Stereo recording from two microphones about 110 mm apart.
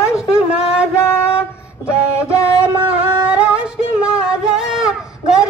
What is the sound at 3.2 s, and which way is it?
Music, 10° right (ahead or behind).